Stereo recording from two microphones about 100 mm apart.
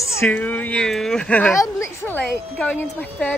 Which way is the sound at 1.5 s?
30° left (ahead or behind).